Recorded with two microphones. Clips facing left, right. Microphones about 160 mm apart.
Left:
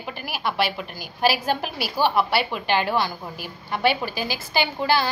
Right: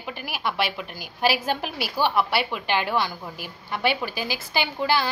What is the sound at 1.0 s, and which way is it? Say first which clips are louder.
A woman's voice: left 2 dB; 40° left (ahead or behind).